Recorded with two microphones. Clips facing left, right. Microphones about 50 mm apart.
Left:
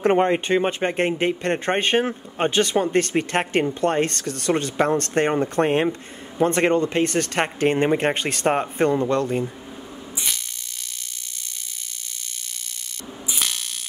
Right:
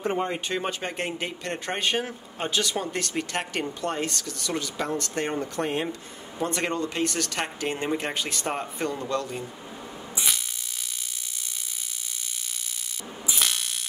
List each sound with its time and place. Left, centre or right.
0.0 s speech: left
0.5 s speech: left
10.1 s a sound: centre
13.3 s ratchet: centre